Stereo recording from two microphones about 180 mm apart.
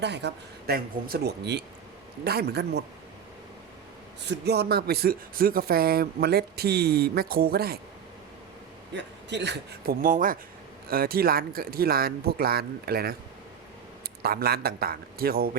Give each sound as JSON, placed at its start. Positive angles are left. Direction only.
{"t": 0.0, "sound": "speech", "side_deg": -70}
{"t": 4.2, "sound": "speech", "side_deg": -70}
{"t": 9.0, "sound": "speech", "side_deg": -75}
{"t": 14.2, "sound": "speech", "side_deg": -60}